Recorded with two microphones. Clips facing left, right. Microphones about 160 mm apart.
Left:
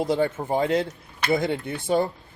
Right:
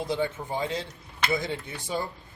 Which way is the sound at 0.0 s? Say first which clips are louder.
Left 6 dB; 50° left (ahead or behind).